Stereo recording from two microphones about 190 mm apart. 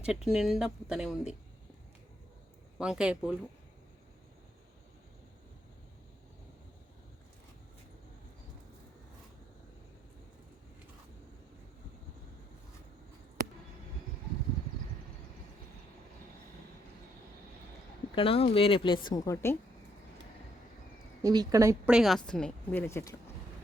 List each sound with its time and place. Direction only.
0.0 s speech: 5° right (ahead or behind)
2.7 s speech: 5° right (ahead or behind)
18.1 s speech: 30° left (ahead or behind)
21.2 s speech: 20° right (ahead or behind)
21.8 s speech: centre (ahead or behind); by 23.1 s 15° left (ahead or behind)